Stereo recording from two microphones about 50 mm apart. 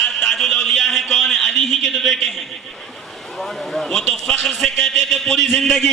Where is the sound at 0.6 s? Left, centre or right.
Centre.